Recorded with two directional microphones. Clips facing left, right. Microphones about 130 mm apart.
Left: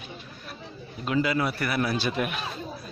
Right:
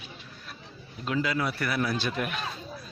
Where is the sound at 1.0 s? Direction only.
5° left (ahead or behind).